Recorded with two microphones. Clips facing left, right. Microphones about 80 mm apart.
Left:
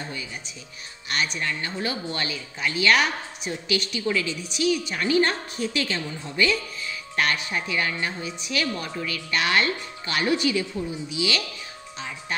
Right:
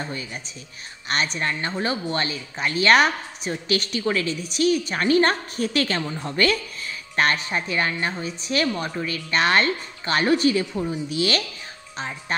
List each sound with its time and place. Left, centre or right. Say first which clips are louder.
1.0 s a woman's voice: right 3 dB; right
6.9 s a woman's voice: right 3 dB; right